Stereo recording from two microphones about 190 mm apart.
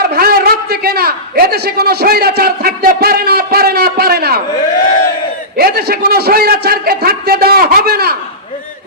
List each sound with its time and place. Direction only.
0.0 s a man's voice: 50° right (ahead or behind)
5.5 s a man's voice: 55° right (ahead or behind)